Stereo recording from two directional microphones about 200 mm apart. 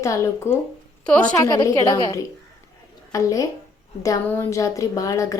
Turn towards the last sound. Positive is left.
turn(degrees=15)  # may be behind; listen again after turning